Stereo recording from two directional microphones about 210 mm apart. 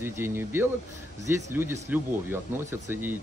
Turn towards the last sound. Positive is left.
turn(degrees=-10)  # may be behind; listen again after turning